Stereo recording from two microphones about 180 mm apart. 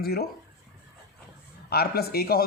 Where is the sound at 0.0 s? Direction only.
60° left (ahead or behind).